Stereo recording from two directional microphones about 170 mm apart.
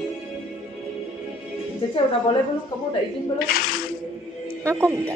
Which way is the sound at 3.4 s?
60° left (ahead or behind).